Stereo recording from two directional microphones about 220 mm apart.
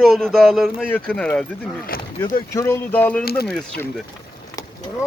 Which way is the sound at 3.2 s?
45° left (ahead or behind).